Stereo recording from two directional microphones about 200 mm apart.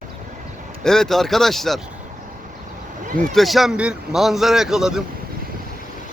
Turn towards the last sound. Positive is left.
turn(degrees=0)  # may be behind; listen again after turning